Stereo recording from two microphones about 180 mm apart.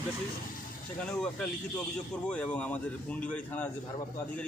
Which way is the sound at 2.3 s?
5° left (ahead or behind).